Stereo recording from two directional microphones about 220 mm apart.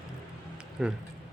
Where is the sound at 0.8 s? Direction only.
5° right (ahead or behind).